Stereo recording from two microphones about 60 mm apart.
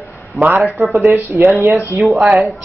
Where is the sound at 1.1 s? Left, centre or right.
Right.